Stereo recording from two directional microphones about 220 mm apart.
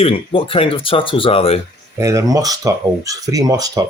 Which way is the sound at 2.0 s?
15° right (ahead or behind).